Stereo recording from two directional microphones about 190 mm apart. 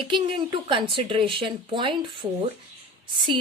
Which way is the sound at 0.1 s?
25° right (ahead or behind).